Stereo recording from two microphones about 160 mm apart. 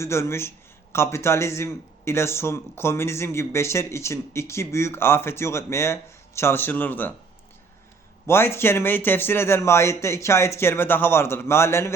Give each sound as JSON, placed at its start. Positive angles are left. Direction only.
{"t": 0.0, "sound": "a man's voice", "side_deg": 15}
{"t": 8.3, "sound": "a man's voice", "side_deg": 15}